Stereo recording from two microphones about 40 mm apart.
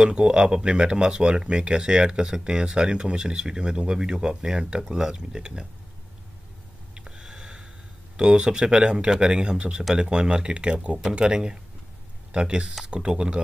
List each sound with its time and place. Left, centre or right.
0.0 s speech: right
6.9 s a sound: centre
8.2 s speech: right